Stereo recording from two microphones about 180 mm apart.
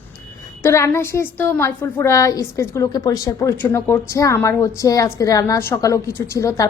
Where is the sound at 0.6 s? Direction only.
15° left (ahead or behind).